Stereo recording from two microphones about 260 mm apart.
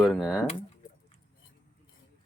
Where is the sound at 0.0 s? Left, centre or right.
Centre.